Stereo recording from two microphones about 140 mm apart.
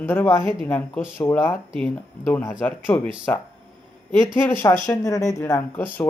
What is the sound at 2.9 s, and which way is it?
Speech, 15° left (ahead or behind).